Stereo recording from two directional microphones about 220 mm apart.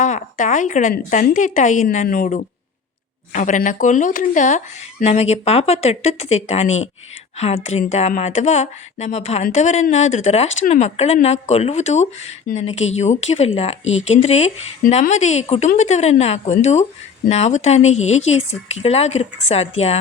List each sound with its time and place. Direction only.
0.0 s speech: 35° left (ahead or behind)